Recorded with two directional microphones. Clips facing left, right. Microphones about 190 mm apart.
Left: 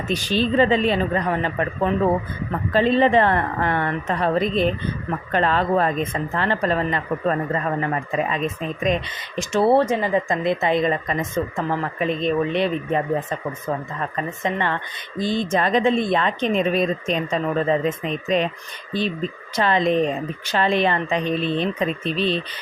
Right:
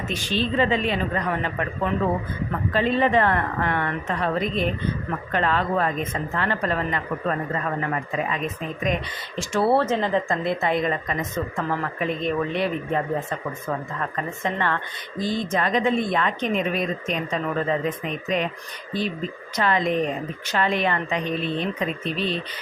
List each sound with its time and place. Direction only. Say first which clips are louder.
0.1 s speech: left 5 dB; 35° left (ahead or behind)
8.8 s speech: left 4 dB; 20° left (ahead or behind)
10.4 s speech: left 3 dB; 20° left (ahead or behind)
19.5 s speech: left 3 dB; 25° left (ahead or behind)